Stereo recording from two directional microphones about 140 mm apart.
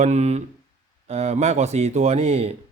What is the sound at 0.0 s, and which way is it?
Speech, 55° right (ahead or behind).